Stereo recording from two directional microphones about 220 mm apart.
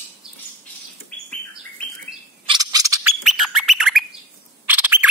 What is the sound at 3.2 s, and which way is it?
Bird, centre (ahead or behind).